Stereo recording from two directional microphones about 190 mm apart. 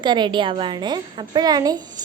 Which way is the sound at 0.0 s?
25° right (ahead or behind).